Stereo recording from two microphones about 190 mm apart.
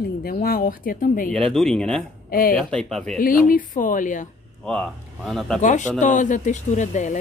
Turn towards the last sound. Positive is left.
turn(degrees=40)  # may be behind; listen again after turning